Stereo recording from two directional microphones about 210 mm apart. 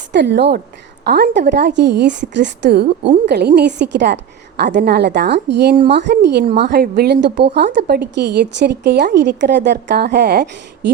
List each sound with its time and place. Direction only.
0.1 s a woman's voice: 55° right (ahead or behind)